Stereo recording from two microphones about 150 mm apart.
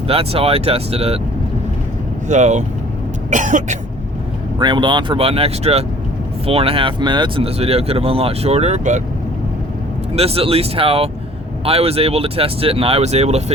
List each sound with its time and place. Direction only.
0.1 s speech: 40° right (ahead or behind)
2.2 s speech: 50° right (ahead or behind)
3.2 s cough: 55° right (ahead or behind)
4.6 s speech: 30° right (ahead or behind); by 9.0 s 50° right (ahead or behind)
10.2 s speech: 40° right (ahead or behind)